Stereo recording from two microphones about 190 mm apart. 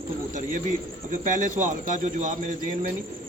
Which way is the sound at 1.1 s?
40° right (ahead or behind).